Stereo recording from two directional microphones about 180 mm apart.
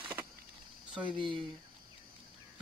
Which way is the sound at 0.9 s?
25° right (ahead or behind).